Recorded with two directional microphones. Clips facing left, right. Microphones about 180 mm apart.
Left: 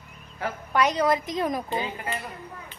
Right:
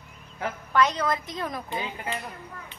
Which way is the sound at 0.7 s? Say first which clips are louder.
Left 2 dB; 15° left (ahead or behind).